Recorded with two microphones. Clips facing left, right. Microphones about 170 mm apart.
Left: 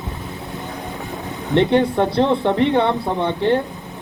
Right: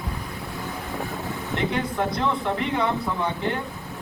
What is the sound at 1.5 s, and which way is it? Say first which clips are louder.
Speech: left 11 dB; 35° left (ahead or behind).